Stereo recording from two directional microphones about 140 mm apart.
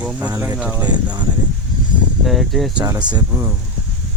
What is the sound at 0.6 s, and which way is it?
Speech, 10° right (ahead or behind).